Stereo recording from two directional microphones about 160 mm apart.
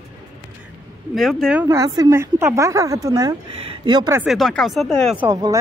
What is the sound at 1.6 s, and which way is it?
A woman's voice, 20° right (ahead or behind).